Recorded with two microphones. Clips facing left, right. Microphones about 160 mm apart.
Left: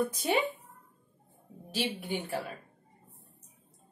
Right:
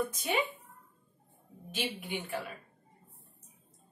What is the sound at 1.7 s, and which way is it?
Speech, 35° left (ahead or behind).